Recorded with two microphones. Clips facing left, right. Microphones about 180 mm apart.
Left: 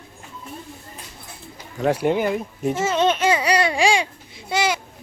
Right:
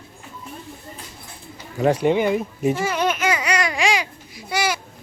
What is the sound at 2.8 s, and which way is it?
Babbling, 25° left (ahead or behind).